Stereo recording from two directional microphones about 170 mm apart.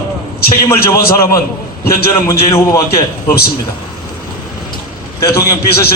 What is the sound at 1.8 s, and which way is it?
A man's voice, 15° left (ahead or behind).